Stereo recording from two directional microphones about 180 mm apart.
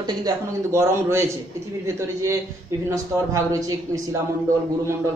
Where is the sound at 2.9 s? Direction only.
15° right (ahead or behind).